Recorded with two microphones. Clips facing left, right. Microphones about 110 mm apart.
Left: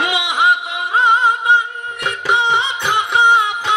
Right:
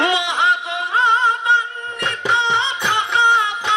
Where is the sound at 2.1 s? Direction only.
15° left (ahead or behind).